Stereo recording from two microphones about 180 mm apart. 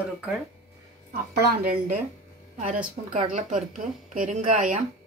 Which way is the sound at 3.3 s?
45° right (ahead or behind).